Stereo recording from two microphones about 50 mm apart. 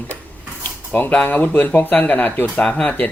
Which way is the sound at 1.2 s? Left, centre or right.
Left.